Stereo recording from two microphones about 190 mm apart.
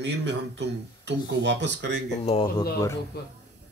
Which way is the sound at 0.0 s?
70° right (ahead or behind).